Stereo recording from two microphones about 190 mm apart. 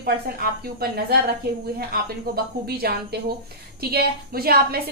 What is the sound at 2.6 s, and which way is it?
A woman's voice, 55° right (ahead or behind).